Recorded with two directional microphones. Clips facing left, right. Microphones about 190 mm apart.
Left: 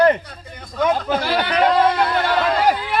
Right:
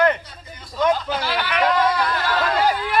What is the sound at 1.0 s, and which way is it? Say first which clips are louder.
Speech: left 5 dB; 50° left (ahead or behind).